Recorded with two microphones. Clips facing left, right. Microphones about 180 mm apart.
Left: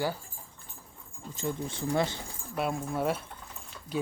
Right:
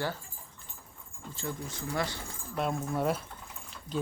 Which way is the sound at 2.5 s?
5° left (ahead or behind).